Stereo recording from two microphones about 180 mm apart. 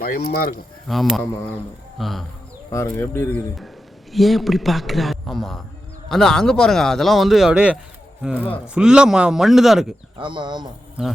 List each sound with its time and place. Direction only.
0.3 s speech: 60° left (ahead or behind)
0.9 s speech: centre (ahead or behind)
2.6 s speech: 15° left (ahead or behind)
4.1 s speech: centre (ahead or behind)
10.2 s speech: 25° right (ahead or behind)
11.0 s speech: 5° right (ahead or behind)